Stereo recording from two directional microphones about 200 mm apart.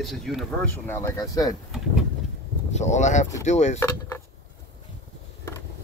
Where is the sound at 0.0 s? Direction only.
Centre (ahead or behind).